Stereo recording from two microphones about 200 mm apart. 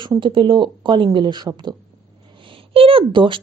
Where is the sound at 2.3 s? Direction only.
25° right (ahead or behind).